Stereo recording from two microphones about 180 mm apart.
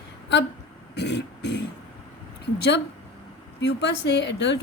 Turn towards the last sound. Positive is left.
turn(degrees=75)  # may be behind; listen again after turning